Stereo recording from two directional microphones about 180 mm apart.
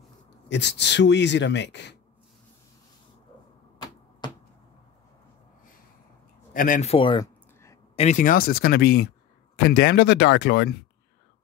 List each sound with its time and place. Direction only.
0.5 s speech: 75° left (ahead or behind)
6.5 s speech: 50° left (ahead or behind)
6.9 s speech: 30° left (ahead or behind); by 10.8 s 70° left (ahead or behind)